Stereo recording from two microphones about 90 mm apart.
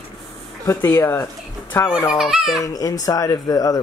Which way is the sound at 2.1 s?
5° right (ahead or behind).